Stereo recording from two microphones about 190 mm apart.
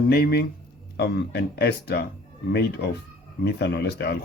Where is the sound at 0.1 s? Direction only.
55° left (ahead or behind).